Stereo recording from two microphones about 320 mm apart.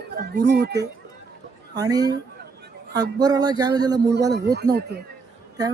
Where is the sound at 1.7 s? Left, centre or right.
Centre.